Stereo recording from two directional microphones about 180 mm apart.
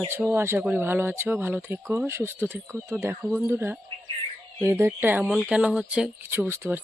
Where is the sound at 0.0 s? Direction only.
15° right (ahead or behind).